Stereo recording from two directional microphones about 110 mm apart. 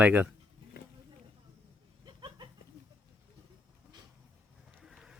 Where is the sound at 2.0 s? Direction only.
40° right (ahead or behind).